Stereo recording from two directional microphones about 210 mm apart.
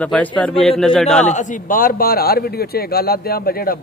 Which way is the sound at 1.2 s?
35° left (ahead or behind).